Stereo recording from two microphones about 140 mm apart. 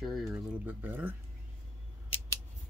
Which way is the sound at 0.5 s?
10° right (ahead or behind).